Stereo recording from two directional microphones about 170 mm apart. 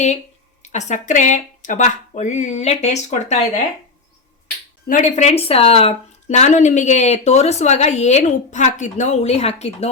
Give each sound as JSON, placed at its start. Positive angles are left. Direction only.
{"t": 0.6, "sound": "speech", "side_deg": 45}
{"t": 4.9, "sound": "speech", "side_deg": 45}